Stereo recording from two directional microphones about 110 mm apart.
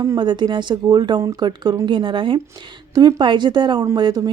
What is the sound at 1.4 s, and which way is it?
Speech, 40° right (ahead or behind).